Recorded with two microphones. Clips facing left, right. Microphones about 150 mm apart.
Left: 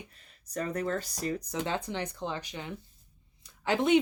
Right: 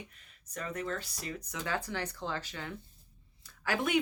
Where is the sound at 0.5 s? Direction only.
40° left (ahead or behind).